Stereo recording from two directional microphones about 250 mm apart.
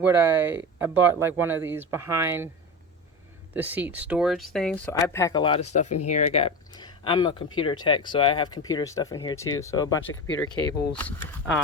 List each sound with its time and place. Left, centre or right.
0.0 s speech: centre
3.5 s speech: centre
10.1 s speech: left